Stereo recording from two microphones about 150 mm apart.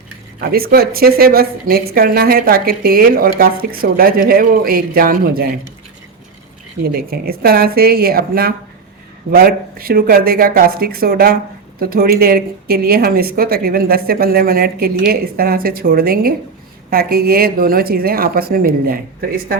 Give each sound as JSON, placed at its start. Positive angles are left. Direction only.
{"t": 0.3, "sound": "a woman's voice", "side_deg": -90}
{"t": 6.9, "sound": "a woman's voice", "side_deg": -85}
{"t": 16.9, "sound": "a woman's voice", "side_deg": -90}